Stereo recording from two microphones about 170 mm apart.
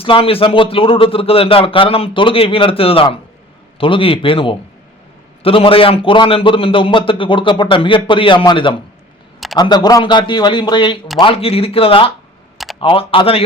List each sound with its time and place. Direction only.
0.0 s a man's voice: 35° left (ahead or behind)